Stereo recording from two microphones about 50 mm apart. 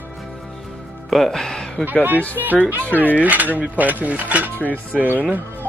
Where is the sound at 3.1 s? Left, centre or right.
Right.